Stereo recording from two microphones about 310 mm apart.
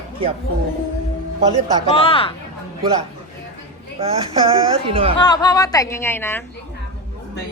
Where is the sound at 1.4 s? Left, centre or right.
Centre.